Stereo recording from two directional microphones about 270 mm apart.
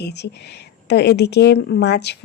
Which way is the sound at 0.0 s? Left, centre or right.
Left.